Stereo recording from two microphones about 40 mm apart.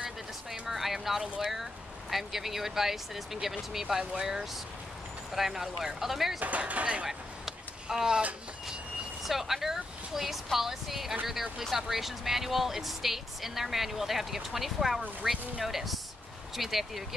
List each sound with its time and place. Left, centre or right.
0.5 s speech: centre
6.7 s speech: right
7.1 s vehicle: centre
9.2 s speech: centre